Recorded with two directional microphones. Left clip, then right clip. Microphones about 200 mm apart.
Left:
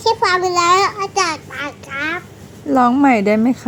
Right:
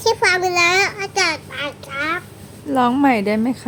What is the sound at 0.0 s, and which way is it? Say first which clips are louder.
Babbling: left 1 dB; 15° right (ahead or behind).